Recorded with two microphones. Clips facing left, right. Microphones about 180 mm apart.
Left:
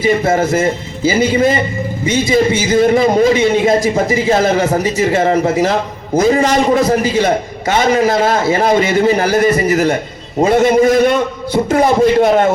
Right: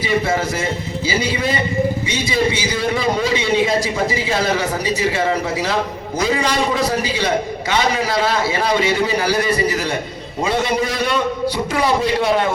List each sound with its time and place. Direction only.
0.0 s a man's voice: 45° left (ahead or behind)